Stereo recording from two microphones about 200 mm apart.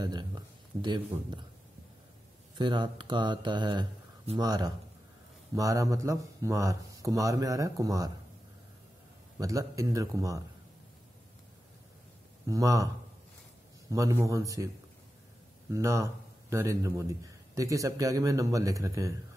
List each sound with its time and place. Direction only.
0.0 s a sound: 20° right (ahead or behind)
0.8 s speech: 20° right (ahead or behind)
2.5 s speech: 25° right (ahead or behind)
9.4 s speech: 15° right (ahead or behind)
12.4 s speech: 15° right (ahead or behind)
15.7 s speech: 15° right (ahead or behind)